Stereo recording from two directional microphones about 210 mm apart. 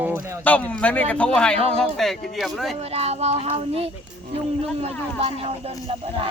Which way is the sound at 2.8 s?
30° right (ahead or behind).